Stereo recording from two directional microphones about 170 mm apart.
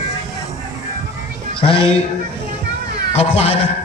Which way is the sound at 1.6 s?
30° left (ahead or behind).